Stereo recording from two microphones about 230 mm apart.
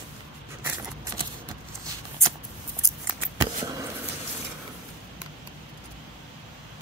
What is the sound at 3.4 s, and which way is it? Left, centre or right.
Scissors, centre.